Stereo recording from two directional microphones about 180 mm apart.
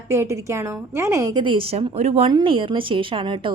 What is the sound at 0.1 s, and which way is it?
A woman's voice, 15° right (ahead or behind).